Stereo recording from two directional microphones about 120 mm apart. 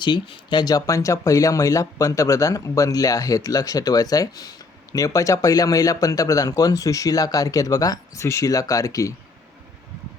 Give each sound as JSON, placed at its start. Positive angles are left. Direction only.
{"t": 0.0, "sound": "speech", "side_deg": 40}